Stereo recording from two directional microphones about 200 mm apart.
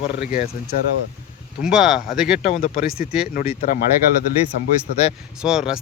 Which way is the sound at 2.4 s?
30° left (ahead or behind).